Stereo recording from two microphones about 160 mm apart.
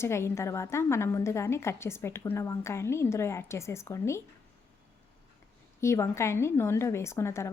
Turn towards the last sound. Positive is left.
turn(degrees=15)  # may be behind; listen again after turning